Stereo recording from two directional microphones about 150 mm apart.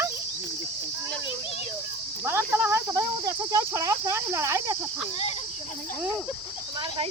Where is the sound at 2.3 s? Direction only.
15° right (ahead or behind).